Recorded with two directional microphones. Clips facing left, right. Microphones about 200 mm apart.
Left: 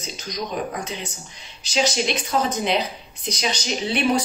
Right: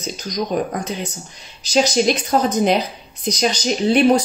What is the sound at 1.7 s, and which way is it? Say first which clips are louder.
Speech: right 6 dB; 45° right (ahead or behind).